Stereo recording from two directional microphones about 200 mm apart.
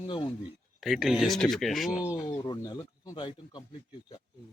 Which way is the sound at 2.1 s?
20° left (ahead or behind).